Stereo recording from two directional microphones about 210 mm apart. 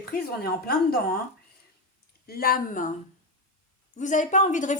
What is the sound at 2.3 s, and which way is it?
Speech, 45° left (ahead or behind).